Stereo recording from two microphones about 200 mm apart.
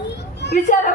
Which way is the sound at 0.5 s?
40° left (ahead or behind).